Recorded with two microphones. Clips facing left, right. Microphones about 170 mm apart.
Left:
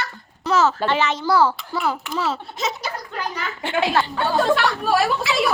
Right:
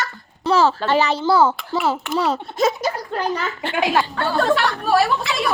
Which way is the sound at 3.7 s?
15° right (ahead or behind).